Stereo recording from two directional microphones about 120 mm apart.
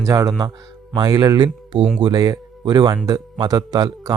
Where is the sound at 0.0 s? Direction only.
30° right (ahead or behind).